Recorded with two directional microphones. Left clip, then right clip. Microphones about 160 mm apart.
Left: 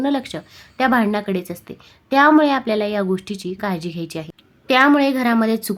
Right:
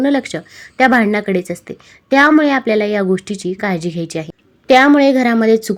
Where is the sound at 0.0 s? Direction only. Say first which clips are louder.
Right 6 dB; 20° right (ahead or behind).